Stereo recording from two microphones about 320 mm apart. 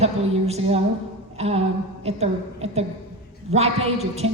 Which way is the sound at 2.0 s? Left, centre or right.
Centre.